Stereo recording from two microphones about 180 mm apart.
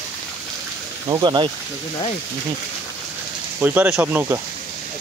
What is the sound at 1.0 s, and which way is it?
Speech, 20° right (ahead or behind).